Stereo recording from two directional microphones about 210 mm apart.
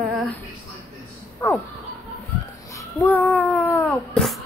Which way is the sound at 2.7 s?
10° left (ahead or behind).